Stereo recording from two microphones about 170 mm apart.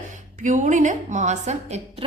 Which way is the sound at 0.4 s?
45° right (ahead or behind).